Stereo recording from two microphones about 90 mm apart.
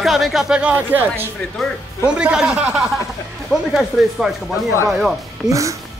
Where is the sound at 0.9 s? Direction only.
20° right (ahead or behind).